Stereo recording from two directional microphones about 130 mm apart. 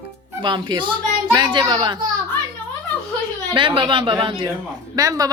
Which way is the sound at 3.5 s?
40° right (ahead or behind).